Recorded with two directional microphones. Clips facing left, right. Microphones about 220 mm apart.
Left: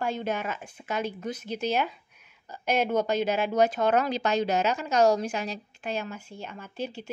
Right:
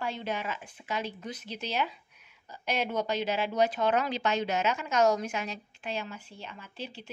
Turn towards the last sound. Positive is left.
turn(degrees=45)  # may be behind; listen again after turning